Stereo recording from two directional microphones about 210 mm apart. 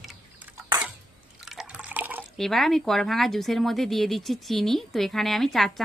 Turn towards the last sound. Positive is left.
turn(degrees=0)  # may be behind; listen again after turning